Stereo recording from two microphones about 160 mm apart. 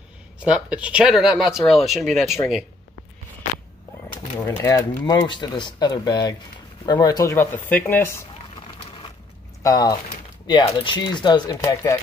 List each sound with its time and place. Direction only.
0.4 s speech: 5° right (ahead or behind)
4.4 s speech: 20° left (ahead or behind)
9.6 s speech: 20° left (ahead or behind)